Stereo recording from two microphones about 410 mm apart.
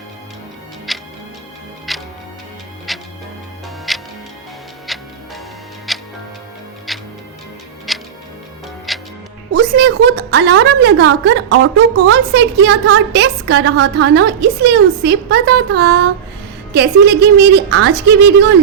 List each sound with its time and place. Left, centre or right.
0.9 s music: centre
5.9 s tick-tock: centre
7.9 s music: centre
9.6 s a woman's voice: right